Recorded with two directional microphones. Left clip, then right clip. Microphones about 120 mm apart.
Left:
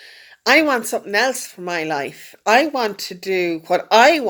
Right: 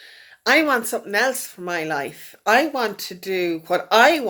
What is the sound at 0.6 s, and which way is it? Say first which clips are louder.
A woman's voice: left 2 dB; 45° left (ahead or behind).